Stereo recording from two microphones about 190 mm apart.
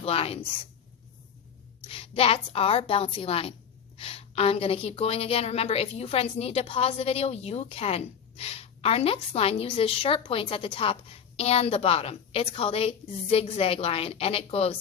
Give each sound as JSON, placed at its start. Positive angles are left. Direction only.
{"t": 0.0, "sound": "a woman's voice", "side_deg": 30}
{"t": 1.9, "sound": "a woman's voice", "side_deg": 30}